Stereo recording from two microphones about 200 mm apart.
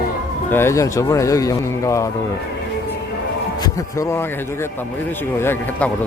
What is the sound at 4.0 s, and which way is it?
Speech, 15° left (ahead or behind).